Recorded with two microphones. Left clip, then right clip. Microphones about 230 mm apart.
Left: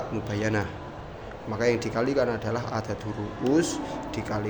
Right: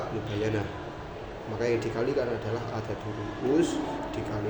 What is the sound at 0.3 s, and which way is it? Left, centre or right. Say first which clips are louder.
Speech: left 2 dB; left.